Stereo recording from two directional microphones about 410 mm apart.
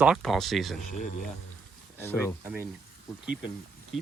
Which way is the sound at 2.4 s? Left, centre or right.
Centre.